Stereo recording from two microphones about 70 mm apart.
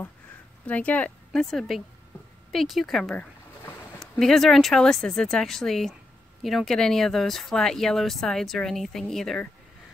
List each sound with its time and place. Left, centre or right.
0.7 s speech: left
1.3 s speech: centre